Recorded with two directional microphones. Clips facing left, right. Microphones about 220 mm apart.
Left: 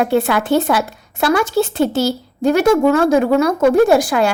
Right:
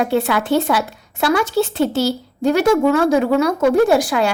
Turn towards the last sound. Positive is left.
turn(degrees=45)  # may be behind; listen again after turning